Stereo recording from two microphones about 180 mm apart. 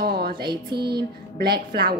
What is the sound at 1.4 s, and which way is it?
Speech, 60° right (ahead or behind).